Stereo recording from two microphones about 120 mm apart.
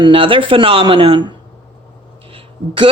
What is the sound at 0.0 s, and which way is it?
Speech, 45° right (ahead or behind).